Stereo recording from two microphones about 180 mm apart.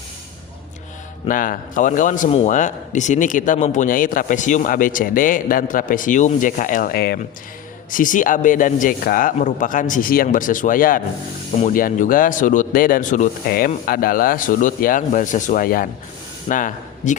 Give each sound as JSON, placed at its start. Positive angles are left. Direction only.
{"t": 1.3, "sound": "a man's voice", "side_deg": 50}
{"t": 7.9, "sound": "a man's voice", "side_deg": 50}